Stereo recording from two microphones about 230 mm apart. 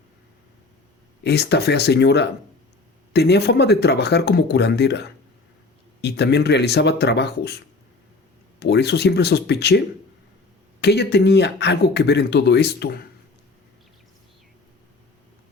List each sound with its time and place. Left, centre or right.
1.2 s speech: left